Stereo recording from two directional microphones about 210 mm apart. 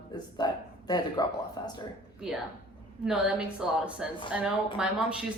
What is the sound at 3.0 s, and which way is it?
A woman's voice, 5° right (ahead or behind).